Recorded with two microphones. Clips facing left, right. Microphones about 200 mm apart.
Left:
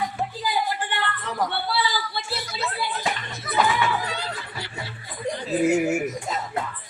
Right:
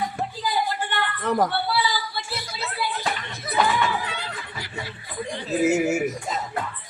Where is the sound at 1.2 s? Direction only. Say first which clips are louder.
Right 8 dB; 50° right (ahead or behind).